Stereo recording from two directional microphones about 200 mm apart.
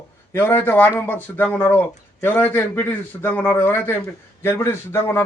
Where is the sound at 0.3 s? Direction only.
10° left (ahead or behind).